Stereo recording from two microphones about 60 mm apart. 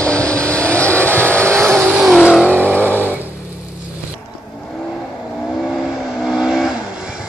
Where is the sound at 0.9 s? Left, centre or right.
Right.